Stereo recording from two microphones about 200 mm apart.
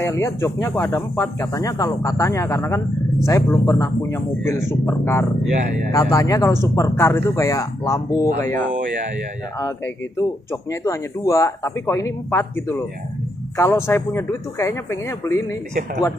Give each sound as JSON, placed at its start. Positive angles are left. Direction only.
{"t": 0.0, "sound": "speech", "side_deg": 15}
{"t": 10.5, "sound": "speech", "side_deg": 15}